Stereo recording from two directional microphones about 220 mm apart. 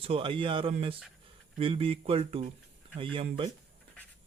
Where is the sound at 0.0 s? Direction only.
25° right (ahead or behind).